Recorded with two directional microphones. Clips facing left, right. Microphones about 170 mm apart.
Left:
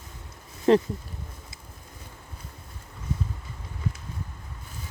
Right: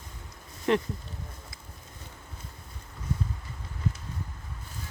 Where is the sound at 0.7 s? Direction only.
35° left (ahead or behind).